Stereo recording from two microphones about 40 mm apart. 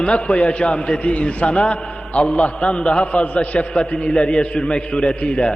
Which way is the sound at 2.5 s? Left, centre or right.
Left.